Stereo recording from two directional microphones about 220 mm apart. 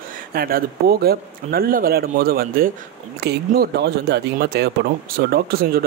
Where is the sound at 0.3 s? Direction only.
40° right (ahead or behind).